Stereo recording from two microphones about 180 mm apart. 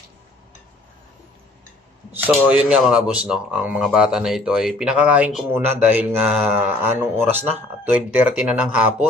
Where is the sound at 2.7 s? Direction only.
5° right (ahead or behind).